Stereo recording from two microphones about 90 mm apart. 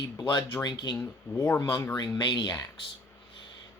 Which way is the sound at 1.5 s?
30° left (ahead or behind).